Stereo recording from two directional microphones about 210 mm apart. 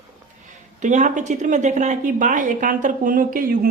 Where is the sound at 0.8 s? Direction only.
35° right (ahead or behind).